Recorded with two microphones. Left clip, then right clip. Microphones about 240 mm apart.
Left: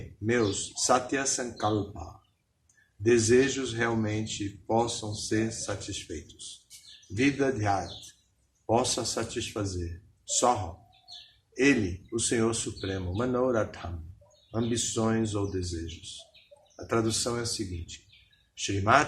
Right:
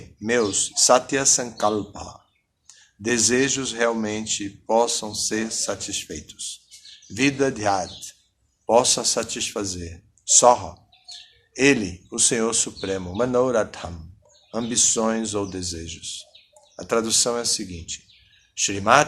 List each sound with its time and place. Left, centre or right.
0.9 s speech: right
3.0 s speech: right
7.1 s speech: right
16.7 s speech: right
18.5 s speech: right